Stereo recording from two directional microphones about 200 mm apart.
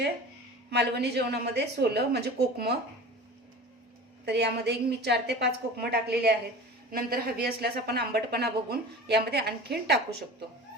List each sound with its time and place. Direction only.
0.7 s a woman's voice: 55° right (ahead or behind)
4.3 s a woman's voice: 55° right (ahead or behind)